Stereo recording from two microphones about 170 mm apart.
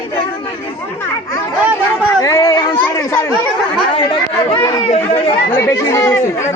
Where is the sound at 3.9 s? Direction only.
30° left (ahead or behind).